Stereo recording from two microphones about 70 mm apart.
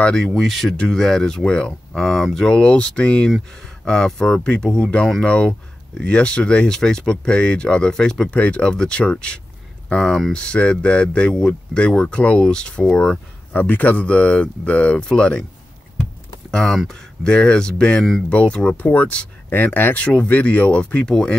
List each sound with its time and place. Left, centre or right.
0.0 s speech: centre
0.3 s speech: centre
5.2 s speech: centre
13.5 s speech: left
16.4 s speech: centre